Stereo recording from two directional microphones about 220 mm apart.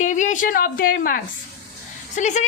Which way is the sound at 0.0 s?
35° left (ahead or behind).